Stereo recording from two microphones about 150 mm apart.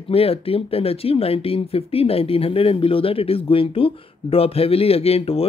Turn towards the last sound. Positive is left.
turn(degrees=40)  # may be behind; listen again after turning